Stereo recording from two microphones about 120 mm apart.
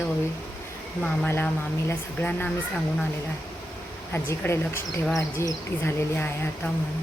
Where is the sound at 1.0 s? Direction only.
15° left (ahead or behind).